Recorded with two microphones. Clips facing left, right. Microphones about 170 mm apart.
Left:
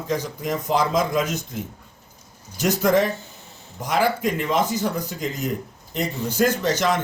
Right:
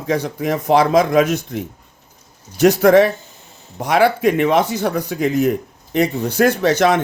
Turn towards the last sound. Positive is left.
turn(degrees=-65)  # may be behind; listen again after turning